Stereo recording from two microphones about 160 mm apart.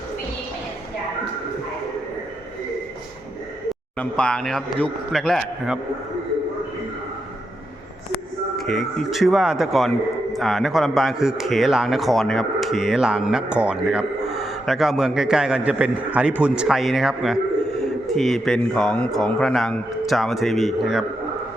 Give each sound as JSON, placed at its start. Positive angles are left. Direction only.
{"t": 3.9, "sound": "a man's voice", "side_deg": 5}
{"t": 8.5, "sound": "a man's voice", "side_deg": 5}